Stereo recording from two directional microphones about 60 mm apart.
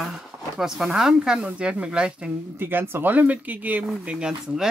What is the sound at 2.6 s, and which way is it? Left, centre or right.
Speech, right.